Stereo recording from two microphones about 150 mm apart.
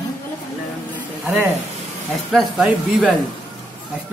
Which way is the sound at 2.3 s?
Centre (ahead or behind).